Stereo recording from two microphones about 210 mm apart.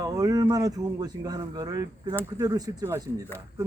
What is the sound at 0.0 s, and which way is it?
A man's voice, 15° right (ahead or behind).